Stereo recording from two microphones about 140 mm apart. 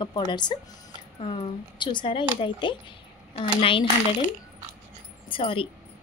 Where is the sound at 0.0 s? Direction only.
30° left (ahead or behind).